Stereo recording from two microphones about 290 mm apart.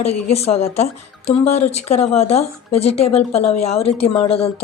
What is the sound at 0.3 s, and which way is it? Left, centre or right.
A woman's voice, left.